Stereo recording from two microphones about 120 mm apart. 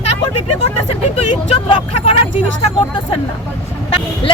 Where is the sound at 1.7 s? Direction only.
55° left (ahead or behind).